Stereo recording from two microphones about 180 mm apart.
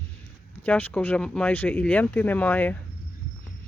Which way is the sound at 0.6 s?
10° left (ahead or behind).